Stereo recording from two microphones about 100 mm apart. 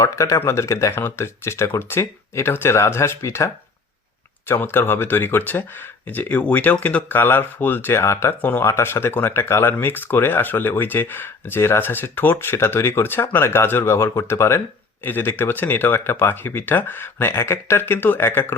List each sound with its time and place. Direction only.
0.0 s speech: 30° left (ahead or behind)